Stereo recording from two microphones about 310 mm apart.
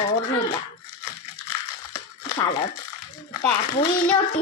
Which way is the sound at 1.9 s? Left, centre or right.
Centre.